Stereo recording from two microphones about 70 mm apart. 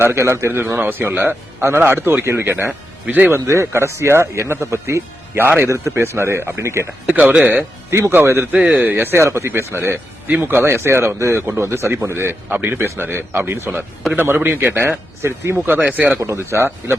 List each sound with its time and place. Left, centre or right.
0.0 s speech: right
3.3 s speech: right
7.3 s speech: right
7.9 s speech: right
15.6 s speech: right
16.1 s speech: right